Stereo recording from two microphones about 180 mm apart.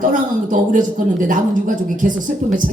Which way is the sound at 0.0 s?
45° right (ahead or behind).